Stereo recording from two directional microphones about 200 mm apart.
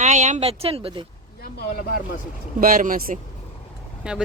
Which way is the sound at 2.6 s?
45° right (ahead or behind).